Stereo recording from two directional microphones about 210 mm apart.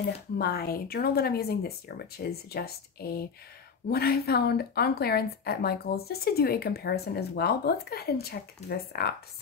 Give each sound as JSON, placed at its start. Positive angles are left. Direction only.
{"t": 0.4, "sound": "speech", "side_deg": 45}